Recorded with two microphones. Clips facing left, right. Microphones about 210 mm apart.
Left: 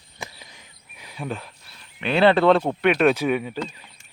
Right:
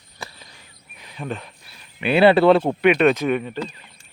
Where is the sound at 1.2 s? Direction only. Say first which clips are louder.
Right 1 dB; 5° left (ahead or behind).